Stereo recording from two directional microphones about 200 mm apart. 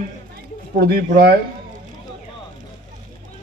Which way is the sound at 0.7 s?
50° right (ahead or behind).